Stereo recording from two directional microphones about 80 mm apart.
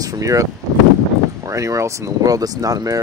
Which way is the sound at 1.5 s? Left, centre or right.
Right.